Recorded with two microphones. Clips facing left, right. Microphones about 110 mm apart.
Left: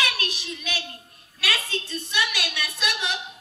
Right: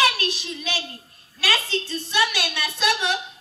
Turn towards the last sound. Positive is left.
turn(degrees=-35)  # may be behind; listen again after turning